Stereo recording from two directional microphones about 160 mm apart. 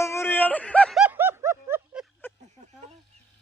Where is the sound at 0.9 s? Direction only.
10° right (ahead or behind).